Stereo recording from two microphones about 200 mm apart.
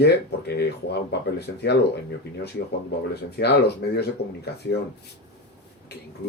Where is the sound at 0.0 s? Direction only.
55° left (ahead or behind).